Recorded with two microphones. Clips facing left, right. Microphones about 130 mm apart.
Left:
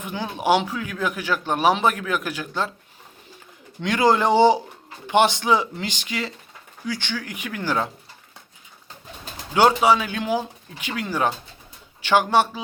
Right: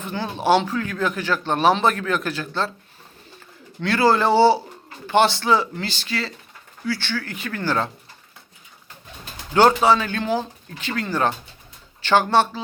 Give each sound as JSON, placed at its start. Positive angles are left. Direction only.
{"t": 0.0, "sound": "speech", "side_deg": 10}
{"t": 3.8, "sound": "speech", "side_deg": 15}
{"t": 9.5, "sound": "speech", "side_deg": 10}